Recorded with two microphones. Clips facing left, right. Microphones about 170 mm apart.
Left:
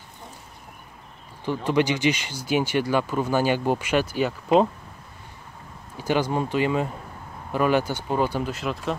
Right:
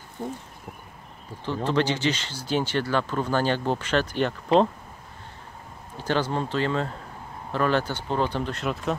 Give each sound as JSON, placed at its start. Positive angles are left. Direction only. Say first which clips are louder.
{"t": 1.4, "sound": "speech", "louder": "left 2 dB", "side_deg": 15}
{"t": 5.9, "sound": "speech", "louder": "left 2 dB", "side_deg": 10}